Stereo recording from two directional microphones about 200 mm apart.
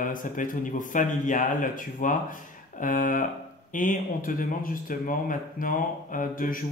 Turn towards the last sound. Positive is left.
turn(degrees=45)  # may be behind; listen again after turning